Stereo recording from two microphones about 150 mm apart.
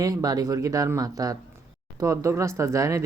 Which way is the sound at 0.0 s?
25° right (ahead or behind).